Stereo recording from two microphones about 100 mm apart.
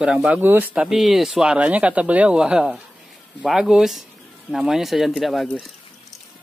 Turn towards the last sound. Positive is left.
turn(degrees=0)  # may be behind; listen again after turning